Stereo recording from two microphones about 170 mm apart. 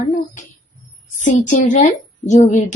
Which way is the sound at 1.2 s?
45° left (ahead or behind).